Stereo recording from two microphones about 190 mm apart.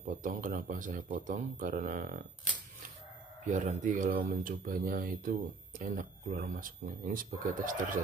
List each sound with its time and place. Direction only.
0.2 s speech: 45° right (ahead or behind)
3.4 s speech: 40° right (ahead or behind)